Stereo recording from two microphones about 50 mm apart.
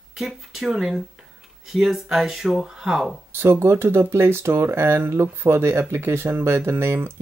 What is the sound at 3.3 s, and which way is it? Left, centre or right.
Speech, right.